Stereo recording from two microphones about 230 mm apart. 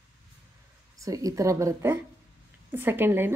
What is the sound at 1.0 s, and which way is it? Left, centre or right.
Speech, centre.